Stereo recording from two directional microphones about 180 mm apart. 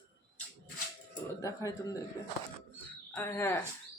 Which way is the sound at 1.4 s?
20° left (ahead or behind).